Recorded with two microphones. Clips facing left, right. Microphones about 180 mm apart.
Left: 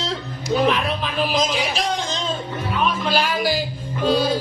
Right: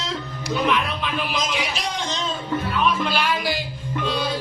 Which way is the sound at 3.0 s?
40° left (ahead or behind).